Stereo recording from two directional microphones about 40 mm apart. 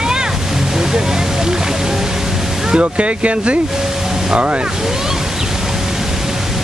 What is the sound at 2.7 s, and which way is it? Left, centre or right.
Speech, right.